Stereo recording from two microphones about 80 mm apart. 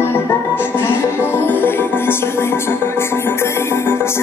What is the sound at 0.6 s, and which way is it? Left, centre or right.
Music, left.